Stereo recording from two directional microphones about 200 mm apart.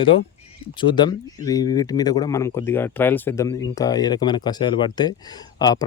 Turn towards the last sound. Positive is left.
turn(degrees=20)  # may be behind; listen again after turning